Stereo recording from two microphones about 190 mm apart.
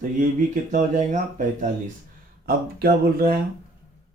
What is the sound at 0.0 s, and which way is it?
Speech, 45° right (ahead or behind).